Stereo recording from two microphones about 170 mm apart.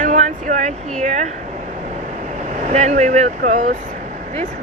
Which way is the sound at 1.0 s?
45° right (ahead or behind).